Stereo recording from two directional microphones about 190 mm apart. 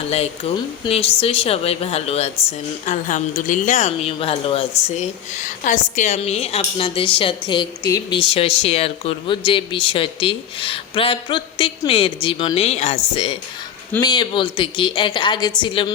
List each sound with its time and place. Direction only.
0.1 s a woman's voice: 30° left (ahead or behind)
14.0 s a woman's voice: 25° left (ahead or behind)